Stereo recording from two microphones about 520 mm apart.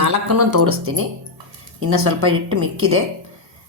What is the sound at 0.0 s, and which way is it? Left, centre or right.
Speech, right.